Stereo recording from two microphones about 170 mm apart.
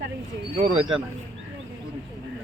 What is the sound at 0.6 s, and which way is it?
Speech, 40° right (ahead or behind).